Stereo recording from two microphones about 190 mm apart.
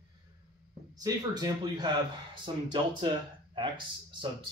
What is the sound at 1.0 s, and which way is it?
A man's voice, 20° right (ahead or behind).